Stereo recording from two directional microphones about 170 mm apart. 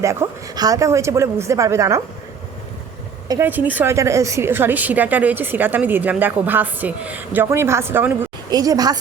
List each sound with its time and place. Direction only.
0.0 s a woman's voice: 15° right (ahead or behind)
3.2 s a woman's voice: 15° right (ahead or behind)